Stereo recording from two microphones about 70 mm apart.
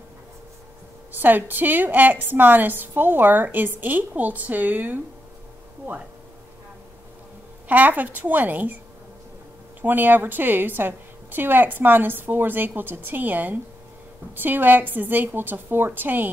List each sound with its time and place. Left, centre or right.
1.1 s a woman's voice: right
7.6 s a woman's voice: right
9.8 s a woman's voice: right